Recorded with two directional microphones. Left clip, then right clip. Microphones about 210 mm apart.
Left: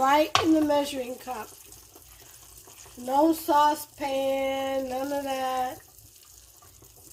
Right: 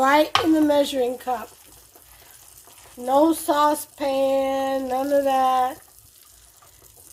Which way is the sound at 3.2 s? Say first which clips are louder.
Left 1 dB; 40° right (ahead or behind).